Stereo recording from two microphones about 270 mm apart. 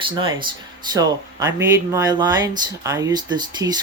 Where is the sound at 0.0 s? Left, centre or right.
Centre.